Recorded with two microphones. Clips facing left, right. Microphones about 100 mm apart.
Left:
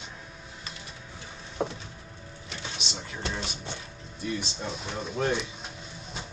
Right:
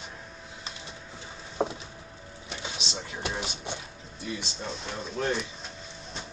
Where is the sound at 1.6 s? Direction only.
25° right (ahead or behind).